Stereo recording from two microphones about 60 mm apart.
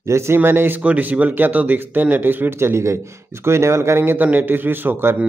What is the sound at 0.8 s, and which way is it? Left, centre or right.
A man's voice, right.